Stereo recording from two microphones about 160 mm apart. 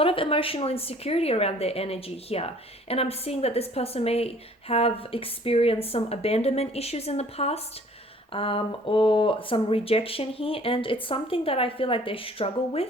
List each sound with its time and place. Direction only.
0.0 s speech: 35° left (ahead or behind)